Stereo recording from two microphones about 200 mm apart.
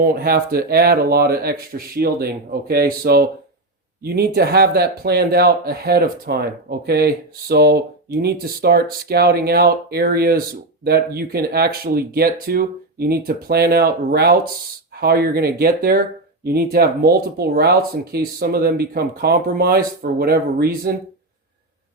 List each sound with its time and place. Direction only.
0.0 s speech: 50° right (ahead or behind)